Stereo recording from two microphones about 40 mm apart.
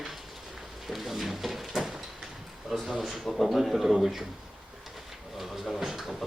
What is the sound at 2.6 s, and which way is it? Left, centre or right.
A man's voice, centre.